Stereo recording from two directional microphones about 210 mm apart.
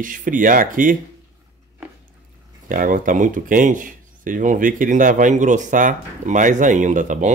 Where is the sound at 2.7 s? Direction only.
40° right (ahead or behind).